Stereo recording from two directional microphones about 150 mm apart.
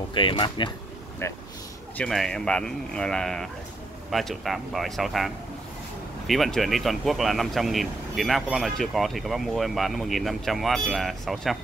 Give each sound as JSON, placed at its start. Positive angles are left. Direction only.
{"t": 0.1, "sound": "speech", "side_deg": 35}
{"t": 1.2, "sound": "speech", "side_deg": 20}
{"t": 2.0, "sound": "speech", "side_deg": 5}